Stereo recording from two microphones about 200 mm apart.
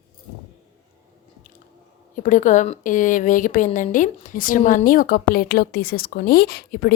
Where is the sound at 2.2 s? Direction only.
40° left (ahead or behind).